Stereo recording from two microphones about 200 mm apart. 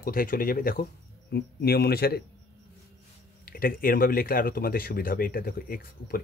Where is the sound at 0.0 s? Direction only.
45° left (ahead or behind).